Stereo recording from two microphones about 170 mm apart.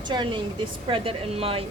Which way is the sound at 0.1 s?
25° right (ahead or behind).